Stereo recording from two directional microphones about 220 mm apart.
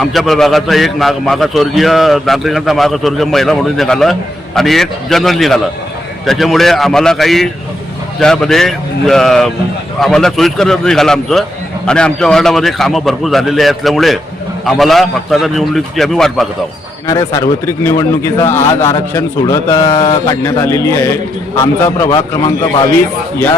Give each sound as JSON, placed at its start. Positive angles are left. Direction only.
{"t": 0.0, "sound": "a man's voice", "side_deg": 0}
{"t": 17.1, "sound": "a man's voice", "side_deg": 15}
{"t": 19.9, "sound": "mantra", "side_deg": 25}
{"t": 20.6, "sound": "a man's voice", "side_deg": 15}